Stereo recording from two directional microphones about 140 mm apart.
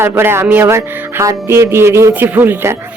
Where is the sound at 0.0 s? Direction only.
15° right (ahead or behind).